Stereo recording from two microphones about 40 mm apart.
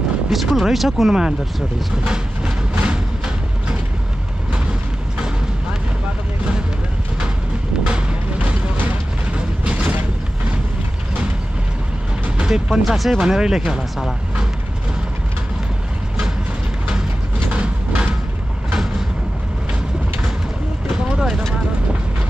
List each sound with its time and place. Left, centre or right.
0.3 s speech: centre
2.0 s train: right
7.8 s music: right
8.4 s music: right
9.7 s mechanisms: right
12.4 s speech: centre
12.8 s speech: centre
13.2 s speech: centre
17.5 s a sound: right
20.9 s vehicle: centre